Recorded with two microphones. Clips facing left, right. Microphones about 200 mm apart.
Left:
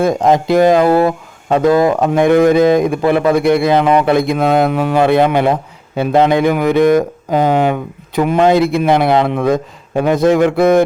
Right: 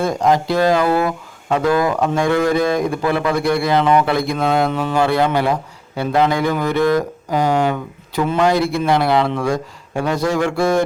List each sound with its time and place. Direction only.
0.0 s speech: 20° left (ahead or behind)